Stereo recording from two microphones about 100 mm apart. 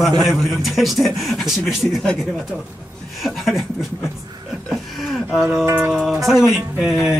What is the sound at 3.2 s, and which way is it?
Speech, centre (ahead or behind).